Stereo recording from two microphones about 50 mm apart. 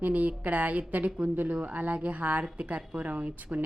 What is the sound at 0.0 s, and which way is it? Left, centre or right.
A woman's voice, right.